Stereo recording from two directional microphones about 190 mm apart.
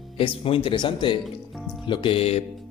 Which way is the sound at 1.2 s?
Centre (ahead or behind).